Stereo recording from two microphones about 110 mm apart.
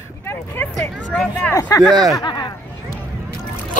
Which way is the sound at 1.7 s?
30° left (ahead or behind).